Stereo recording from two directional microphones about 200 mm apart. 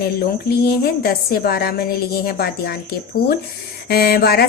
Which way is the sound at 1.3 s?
50° left (ahead or behind).